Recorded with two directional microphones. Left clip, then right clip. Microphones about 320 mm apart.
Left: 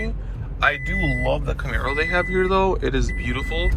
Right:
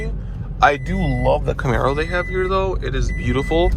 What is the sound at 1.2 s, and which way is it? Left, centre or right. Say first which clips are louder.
Speech: right 5 dB; right.